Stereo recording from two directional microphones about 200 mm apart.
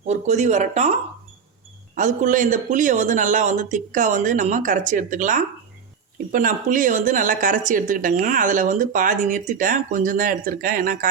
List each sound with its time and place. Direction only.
0.0 s speech: 35° right (ahead or behind)
2.0 s a woman's voice: 40° right (ahead or behind)